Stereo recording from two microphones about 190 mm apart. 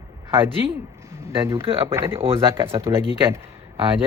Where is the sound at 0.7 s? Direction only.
15° right (ahead or behind).